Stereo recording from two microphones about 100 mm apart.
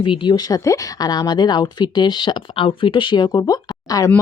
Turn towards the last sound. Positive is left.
turn(degrees=35)  # may be behind; listen again after turning